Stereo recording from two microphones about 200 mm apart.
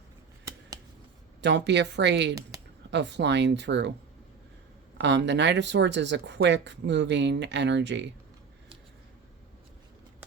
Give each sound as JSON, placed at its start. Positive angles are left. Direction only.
{"t": 1.4, "sound": "speech", "side_deg": -60}
{"t": 2.5, "sound": "a sound", "side_deg": -15}
{"t": 2.9, "sound": "speech", "side_deg": -60}
{"t": 4.9, "sound": "speech", "side_deg": -60}